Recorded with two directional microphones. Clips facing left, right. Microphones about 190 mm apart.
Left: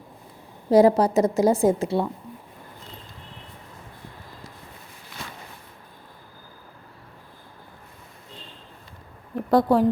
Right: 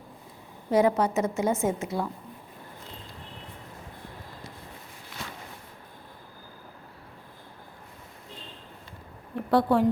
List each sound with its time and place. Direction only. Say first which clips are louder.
0.7 s a woman's voice: left 6 dB; 35° left (ahead or behind)
9.5 s a woman's voice: left 3 dB; 40° left (ahead or behind)